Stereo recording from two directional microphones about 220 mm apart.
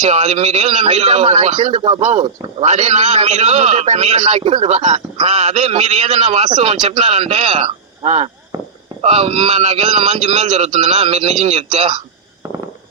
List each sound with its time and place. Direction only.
0.0 s a man's voice: 30° right (ahead or behind)
8.5 s a sound: 15° right (ahead or behind)
9.0 s a man's voice: 30° right (ahead or behind)
12.4 s fireworks: 15° right (ahead or behind)